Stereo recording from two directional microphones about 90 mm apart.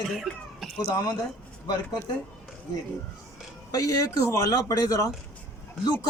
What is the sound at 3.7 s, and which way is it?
A man's voice, 40° left (ahead or behind).